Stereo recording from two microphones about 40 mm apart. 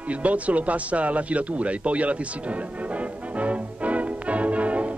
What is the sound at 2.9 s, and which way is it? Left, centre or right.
Music, right.